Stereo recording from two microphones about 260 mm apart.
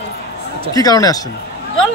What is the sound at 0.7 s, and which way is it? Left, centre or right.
Speech, centre.